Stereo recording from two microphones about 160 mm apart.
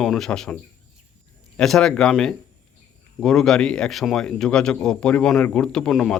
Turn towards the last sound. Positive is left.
turn(degrees=0)  # may be behind; listen again after turning